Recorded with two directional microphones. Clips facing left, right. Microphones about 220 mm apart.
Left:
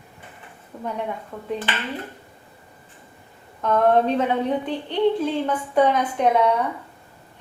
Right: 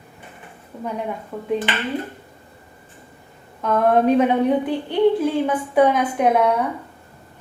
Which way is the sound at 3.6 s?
5° right (ahead or behind).